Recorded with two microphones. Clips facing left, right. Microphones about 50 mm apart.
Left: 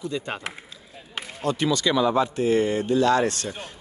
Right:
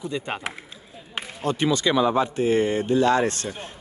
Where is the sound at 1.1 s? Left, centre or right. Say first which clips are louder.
Even; right.